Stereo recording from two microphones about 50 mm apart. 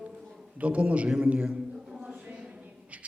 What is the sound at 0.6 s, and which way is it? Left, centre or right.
Speech, right.